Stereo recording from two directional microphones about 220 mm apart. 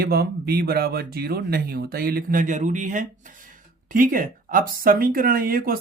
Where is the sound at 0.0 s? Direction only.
45° right (ahead or behind).